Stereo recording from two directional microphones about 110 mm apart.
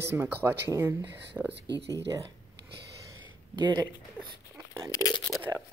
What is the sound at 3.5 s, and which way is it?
Speech, 40° right (ahead or behind).